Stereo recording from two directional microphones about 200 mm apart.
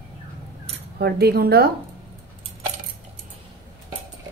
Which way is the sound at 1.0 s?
50° right (ahead or behind).